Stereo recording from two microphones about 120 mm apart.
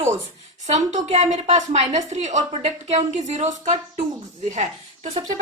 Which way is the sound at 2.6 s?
65° right (ahead or behind).